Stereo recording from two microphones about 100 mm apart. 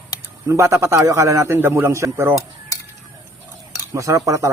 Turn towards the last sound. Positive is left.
turn(degrees=-35)  # may be behind; listen again after turning